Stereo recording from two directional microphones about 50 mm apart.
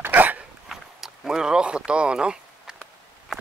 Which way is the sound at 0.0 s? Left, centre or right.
Right.